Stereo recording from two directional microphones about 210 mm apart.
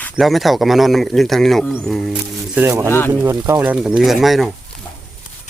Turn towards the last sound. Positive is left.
turn(degrees=0)  # may be behind; listen again after turning